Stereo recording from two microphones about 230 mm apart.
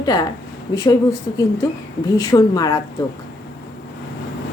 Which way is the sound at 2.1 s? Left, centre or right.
Centre.